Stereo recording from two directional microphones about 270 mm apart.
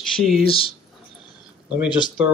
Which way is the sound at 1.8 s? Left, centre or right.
Centre.